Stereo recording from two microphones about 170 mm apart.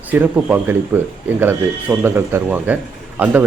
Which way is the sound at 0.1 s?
10° right (ahead or behind).